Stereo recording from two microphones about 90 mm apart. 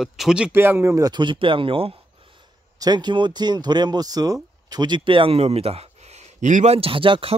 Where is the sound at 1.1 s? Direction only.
65° right (ahead or behind); by 2.4 s 85° right.